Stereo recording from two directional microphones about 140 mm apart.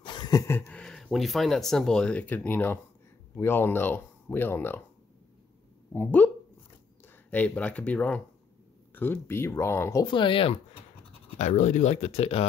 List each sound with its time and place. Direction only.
0.0 s a sound: 30° left (ahead or behind)
0.7 s speech: 5° left (ahead or behind)
5.9 s speech: 15° left (ahead or behind)
10.0 s speech: 35° left (ahead or behind)
11.3 s speech: 55° left (ahead or behind)